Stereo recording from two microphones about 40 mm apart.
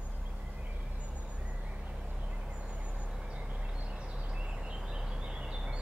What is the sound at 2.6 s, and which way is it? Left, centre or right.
Vehicle, right.